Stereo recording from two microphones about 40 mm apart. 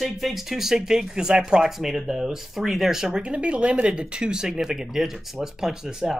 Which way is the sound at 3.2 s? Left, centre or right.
Right.